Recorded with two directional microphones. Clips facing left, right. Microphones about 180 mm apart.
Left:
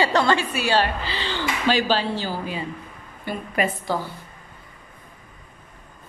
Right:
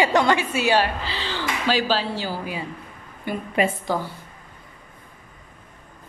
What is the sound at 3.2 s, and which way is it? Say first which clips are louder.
Speech: right 2 dB; 25° right (ahead or behind).